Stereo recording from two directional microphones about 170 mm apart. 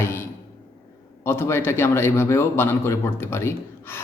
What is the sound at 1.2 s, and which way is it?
A man's voice, 15° left (ahead or behind).